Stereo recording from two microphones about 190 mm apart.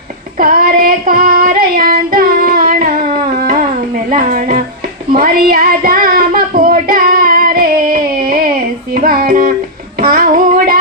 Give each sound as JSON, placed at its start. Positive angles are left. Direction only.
{"t": 0.3, "sound": "child singing", "side_deg": -50}
{"t": 4.1, "sound": "speech", "side_deg": -50}
{"t": 5.1, "sound": "child singing", "side_deg": -50}
{"t": 10.0, "sound": "music", "side_deg": -50}